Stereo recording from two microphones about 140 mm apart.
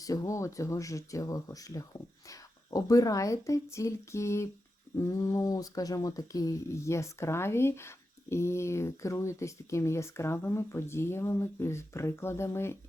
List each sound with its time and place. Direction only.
0.0 s speech: 25° left (ahead or behind)